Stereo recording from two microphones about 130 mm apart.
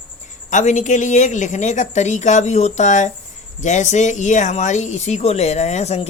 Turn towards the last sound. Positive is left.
turn(degrees=60)  # may be behind; listen again after turning